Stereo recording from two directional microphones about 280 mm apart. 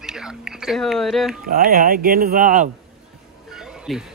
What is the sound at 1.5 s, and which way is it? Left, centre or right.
Speech, right.